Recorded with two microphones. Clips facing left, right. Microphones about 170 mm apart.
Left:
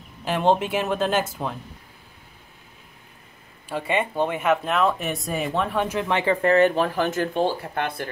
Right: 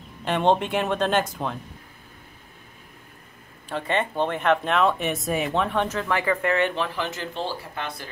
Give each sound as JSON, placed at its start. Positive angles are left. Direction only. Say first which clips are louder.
{"t": 0.2, "sound": "speech", "louder": "even", "side_deg": 5}
{"t": 3.6, "sound": "speech", "louder": "left 1 dB", "side_deg": 10}
{"t": 5.9, "sound": "speech", "louder": "left 2 dB", "side_deg": 20}